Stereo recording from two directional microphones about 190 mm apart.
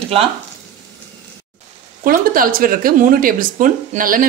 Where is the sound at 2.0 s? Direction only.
45° right (ahead or behind).